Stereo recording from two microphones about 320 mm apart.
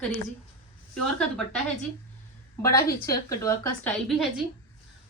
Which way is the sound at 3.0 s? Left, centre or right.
Centre.